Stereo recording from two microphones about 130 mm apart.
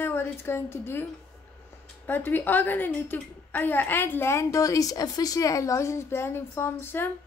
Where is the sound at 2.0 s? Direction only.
15° left (ahead or behind).